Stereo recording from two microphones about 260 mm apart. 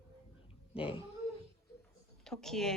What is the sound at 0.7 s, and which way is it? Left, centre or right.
Speech, left.